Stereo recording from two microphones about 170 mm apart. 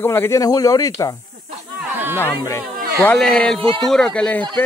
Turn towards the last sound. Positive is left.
turn(degrees=5)  # may be behind; listen again after turning